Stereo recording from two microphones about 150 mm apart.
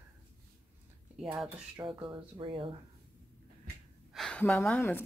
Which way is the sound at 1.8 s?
35° right (ahead or behind).